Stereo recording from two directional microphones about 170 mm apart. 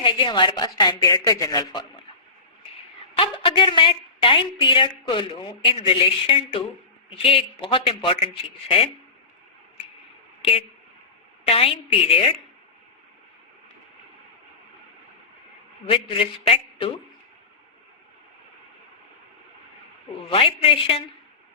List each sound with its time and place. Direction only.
0.0 s a woman's voice: 30° left (ahead or behind)
3.2 s a woman's voice: 30° left (ahead or behind)
11.4 s speech: 35° left (ahead or behind)
15.9 s a woman's voice: 30° left (ahead or behind)
20.3 s speech: 30° left (ahead or behind)